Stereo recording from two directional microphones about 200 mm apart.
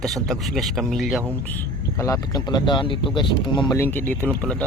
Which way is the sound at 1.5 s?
10° left (ahead or behind).